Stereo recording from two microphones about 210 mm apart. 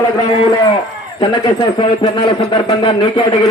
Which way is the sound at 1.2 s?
20° left (ahead or behind).